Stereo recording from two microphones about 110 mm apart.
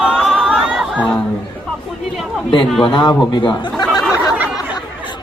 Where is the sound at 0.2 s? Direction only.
Centre (ahead or behind).